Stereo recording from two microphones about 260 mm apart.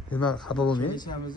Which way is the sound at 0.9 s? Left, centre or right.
Centre.